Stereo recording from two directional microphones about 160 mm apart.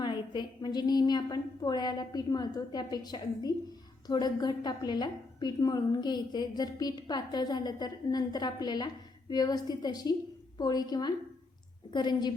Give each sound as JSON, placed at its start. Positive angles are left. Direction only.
{"t": 0.0, "sound": "a woman's voice", "side_deg": 25}